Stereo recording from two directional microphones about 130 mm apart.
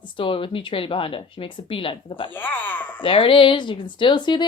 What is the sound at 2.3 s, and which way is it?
Speech, 15° left (ahead or behind).